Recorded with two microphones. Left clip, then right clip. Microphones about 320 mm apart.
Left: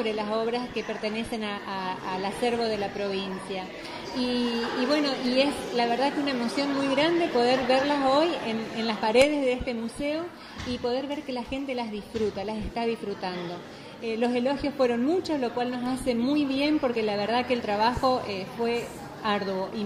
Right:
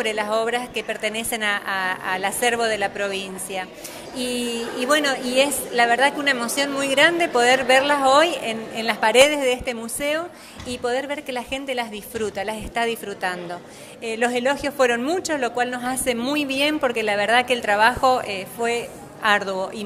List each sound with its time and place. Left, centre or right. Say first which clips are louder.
0.0 s a woman's voice: right 6 dB; right